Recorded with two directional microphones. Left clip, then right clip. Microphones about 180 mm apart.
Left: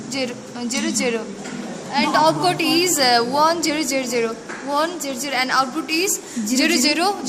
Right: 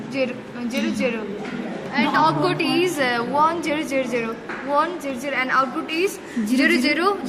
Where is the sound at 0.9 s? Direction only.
75° left (ahead or behind).